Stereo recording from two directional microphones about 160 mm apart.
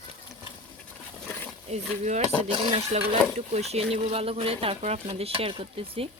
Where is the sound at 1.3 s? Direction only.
10° left (ahead or behind).